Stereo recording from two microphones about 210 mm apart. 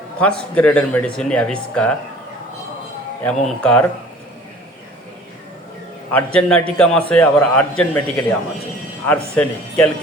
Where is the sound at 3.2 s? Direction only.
5° left (ahead or behind).